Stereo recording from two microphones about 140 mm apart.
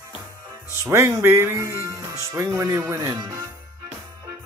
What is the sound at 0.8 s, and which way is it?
Speech, 20° right (ahead or behind).